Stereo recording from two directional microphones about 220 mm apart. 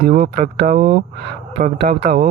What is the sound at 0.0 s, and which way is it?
Speech, 45° right (ahead or behind).